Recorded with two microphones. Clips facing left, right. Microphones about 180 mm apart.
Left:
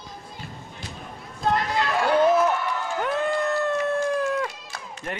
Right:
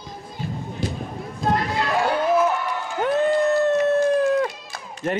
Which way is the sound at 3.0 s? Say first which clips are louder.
Right 7 dB; 20° right (ahead or behind).